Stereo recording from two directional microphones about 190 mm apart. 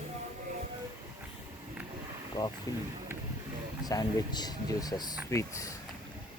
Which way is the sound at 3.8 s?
20° left (ahead or behind).